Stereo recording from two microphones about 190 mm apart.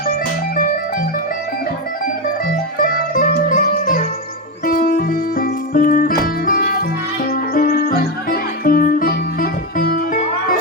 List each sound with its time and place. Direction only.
0.1 s music: 45° left (ahead or behind)
2.7 s music: 45° left (ahead or behind)